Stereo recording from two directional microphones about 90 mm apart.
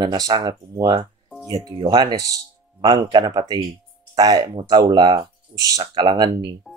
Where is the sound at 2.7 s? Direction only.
45° right (ahead or behind).